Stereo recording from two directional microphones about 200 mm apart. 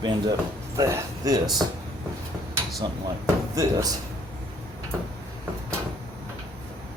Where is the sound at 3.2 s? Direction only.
15° right (ahead or behind).